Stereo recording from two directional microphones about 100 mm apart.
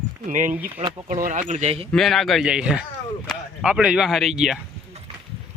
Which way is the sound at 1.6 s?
80° right.